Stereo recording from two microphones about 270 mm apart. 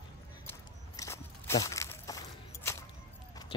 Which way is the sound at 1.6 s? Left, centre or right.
Centre.